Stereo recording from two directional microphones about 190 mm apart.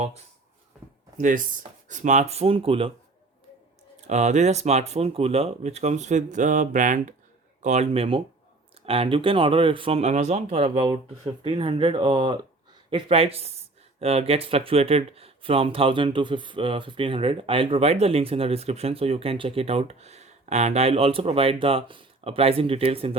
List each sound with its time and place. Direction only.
0.7 s a sound: centre (ahead or behind)
1.9 s speech: 40° right (ahead or behind)
4.0 s speech: 35° right (ahead or behind)